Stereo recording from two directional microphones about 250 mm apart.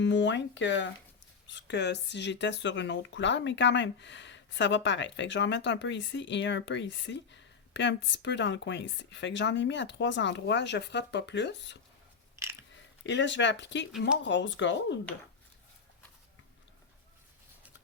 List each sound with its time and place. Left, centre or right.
0.0 s speech: left
13.1 s speech: left